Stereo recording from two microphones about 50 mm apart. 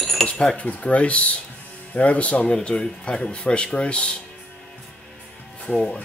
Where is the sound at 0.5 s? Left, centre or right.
Left.